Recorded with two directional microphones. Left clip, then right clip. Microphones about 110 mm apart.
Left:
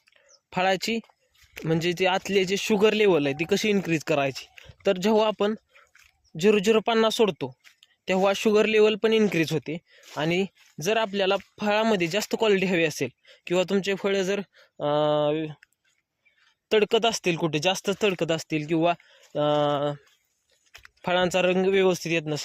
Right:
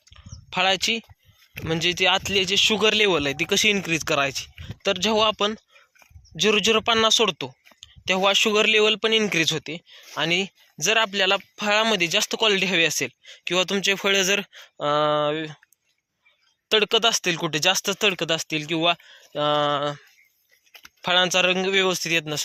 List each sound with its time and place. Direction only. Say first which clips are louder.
0.1 s a sound: right 3 dB; 90° left
1.6 s speech: right 3 dB; 90° left
3.2 s speech: right 4 dB; 45° left (ahead or behind); by 11.3 s 65° left (ahead or behind)
11.5 s speech: right 3 dB; 75° left (ahead or behind)
13.8 s speech: right 5 dB; 35° left (ahead or behind); by 15.6 s 50° left (ahead or behind)
16.6 s speech: right 2 dB; 80° left; by 20.0 s 65° left (ahead or behind)
21.0 s speech: right 3 dB; 90° left; by 22.4 s 60° left (ahead or behind)